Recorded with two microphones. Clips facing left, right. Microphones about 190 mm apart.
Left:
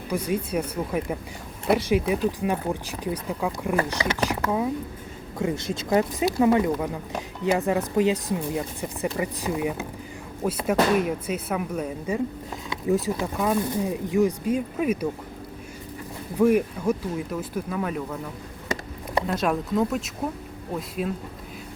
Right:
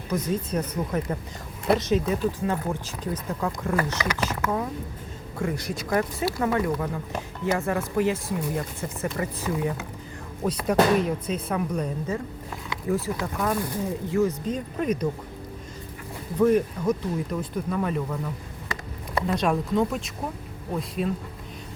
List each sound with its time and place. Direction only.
0.1 s speech: 10° left (ahead or behind)
5.4 s speech: 25° left (ahead or behind)
16.4 s speech: 10° left (ahead or behind)
19.3 s speech: centre (ahead or behind)